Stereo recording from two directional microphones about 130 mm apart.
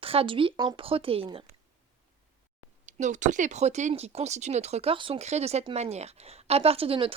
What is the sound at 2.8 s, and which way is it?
Speech, 70° right (ahead or behind).